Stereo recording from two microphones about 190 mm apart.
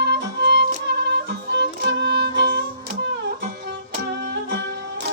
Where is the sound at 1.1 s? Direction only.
65° right (ahead or behind).